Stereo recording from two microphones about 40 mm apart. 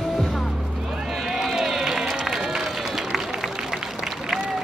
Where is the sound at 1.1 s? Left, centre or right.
Centre.